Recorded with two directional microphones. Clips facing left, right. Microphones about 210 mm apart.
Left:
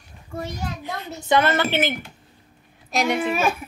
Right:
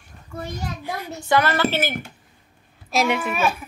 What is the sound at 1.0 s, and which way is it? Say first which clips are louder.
Speech: left 1 dB; 25° left (ahead or behind).